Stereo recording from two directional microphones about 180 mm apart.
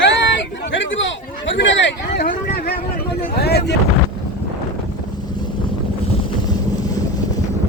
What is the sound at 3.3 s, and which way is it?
Speech, 65° left (ahead or behind).